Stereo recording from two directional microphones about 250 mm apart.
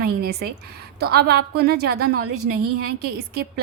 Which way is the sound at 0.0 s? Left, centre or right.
Right.